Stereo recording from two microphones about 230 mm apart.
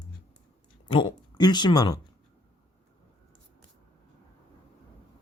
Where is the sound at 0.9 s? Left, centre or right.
Left.